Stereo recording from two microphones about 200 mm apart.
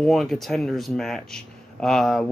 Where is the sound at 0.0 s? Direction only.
Centre (ahead or behind).